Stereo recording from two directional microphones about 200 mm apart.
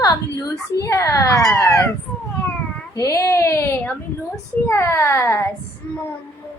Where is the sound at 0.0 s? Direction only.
15° left (ahead or behind).